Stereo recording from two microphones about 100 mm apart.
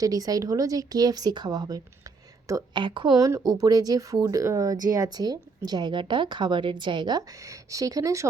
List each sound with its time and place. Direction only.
0.0 s speech: 40° right (ahead or behind)
2.8 s a woman's voice: 55° right (ahead or behind)
3.2 s speech: 35° right (ahead or behind)